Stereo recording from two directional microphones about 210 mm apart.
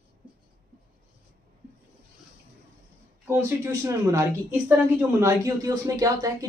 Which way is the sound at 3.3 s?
15° right (ahead or behind).